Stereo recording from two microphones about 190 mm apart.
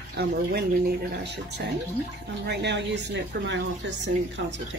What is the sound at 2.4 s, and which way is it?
Speech, 60° right (ahead or behind).